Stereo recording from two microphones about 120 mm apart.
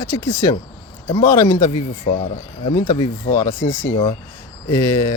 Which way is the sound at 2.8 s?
35° left (ahead or behind).